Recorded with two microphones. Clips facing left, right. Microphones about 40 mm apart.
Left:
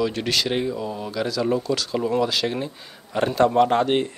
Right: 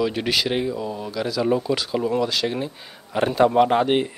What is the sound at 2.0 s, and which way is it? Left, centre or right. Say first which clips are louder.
A man's voice: left 1 dB; centre.